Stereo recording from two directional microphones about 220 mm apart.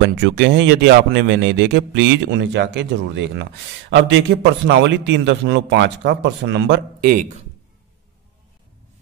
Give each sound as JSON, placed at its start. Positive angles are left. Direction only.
{"t": 0.0, "sound": "a man's voice", "side_deg": -55}